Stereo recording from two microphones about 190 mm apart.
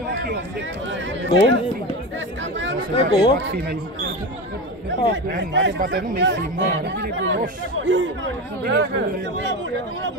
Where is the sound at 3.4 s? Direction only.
55° right (ahead or behind).